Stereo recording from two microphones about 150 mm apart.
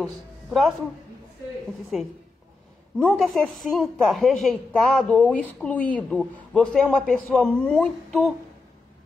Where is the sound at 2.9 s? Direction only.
5° left (ahead or behind).